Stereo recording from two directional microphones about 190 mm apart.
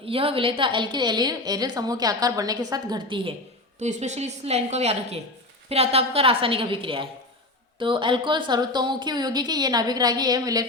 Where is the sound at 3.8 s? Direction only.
35° right (ahead or behind).